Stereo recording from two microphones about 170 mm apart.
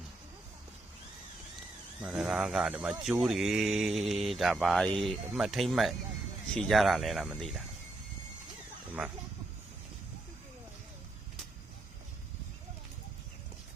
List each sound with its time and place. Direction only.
2.0 s speech: 5° right (ahead or behind)
8.9 s speech: 10° right (ahead or behind)